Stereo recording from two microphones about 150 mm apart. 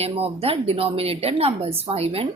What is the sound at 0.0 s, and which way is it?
Speech, 40° right (ahead or behind).